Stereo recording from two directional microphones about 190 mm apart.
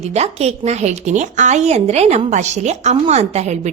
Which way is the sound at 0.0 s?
35° right (ahead or behind).